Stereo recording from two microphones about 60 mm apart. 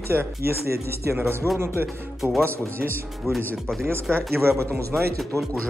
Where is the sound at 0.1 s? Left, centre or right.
Right.